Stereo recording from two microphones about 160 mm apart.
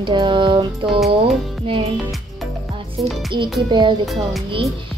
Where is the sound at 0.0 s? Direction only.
30° right (ahead or behind).